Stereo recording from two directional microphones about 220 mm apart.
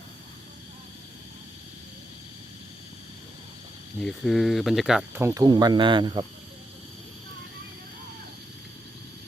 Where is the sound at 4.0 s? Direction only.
Centre (ahead or behind); by 6.2 s 20° right (ahead or behind).